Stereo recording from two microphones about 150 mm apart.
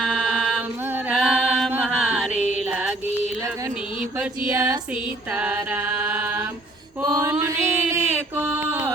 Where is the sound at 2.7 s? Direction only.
5° right (ahead or behind).